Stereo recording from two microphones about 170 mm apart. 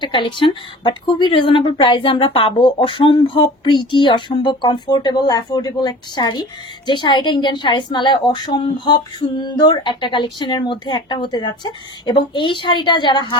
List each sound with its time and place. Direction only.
0.0 s speech: 30° left (ahead or behind)